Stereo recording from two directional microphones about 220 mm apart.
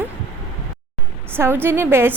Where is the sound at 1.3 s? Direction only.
10° right (ahead or behind).